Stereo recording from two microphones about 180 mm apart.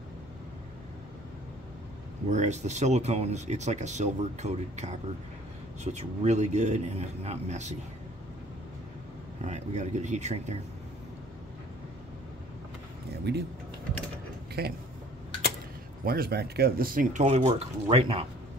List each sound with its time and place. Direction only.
2.2 s speech: 40° right (ahead or behind)
9.4 s speech: 40° right (ahead or behind)
13.3 s speech: 70° right (ahead or behind)
14.6 s speech: 60° right (ahead or behind)
16.1 s speech: 60° right (ahead or behind); by 18.2 s 30° right (ahead or behind)